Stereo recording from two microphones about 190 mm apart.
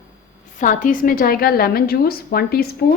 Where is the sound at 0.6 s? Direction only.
45° left (ahead or behind).